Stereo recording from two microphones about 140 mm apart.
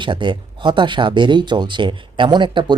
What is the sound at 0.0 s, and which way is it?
Speech, 35° right (ahead or behind).